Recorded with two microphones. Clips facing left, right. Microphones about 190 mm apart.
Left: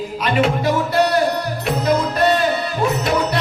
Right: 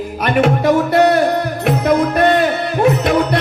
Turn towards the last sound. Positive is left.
turn(degrees=-60)  # may be behind; listen again after turning